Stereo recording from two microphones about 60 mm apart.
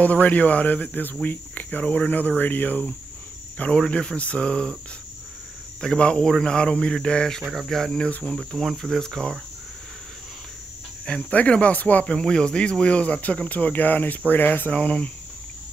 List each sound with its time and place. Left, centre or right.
0.0 s speech: left
3.9 s speech: centre
5.8 s speech: centre
7.4 s cricket: centre
11.1 s speech: centre
12.1 s speech: centre; by 14.8 s left
14.8 s speech: centre